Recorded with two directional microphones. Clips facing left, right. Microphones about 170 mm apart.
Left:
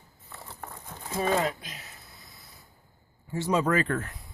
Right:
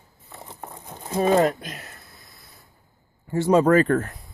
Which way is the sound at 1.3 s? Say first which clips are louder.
Right 9 dB; 45° right (ahead or behind).